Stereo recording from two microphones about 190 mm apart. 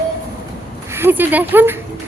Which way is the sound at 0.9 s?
10° right (ahead or behind).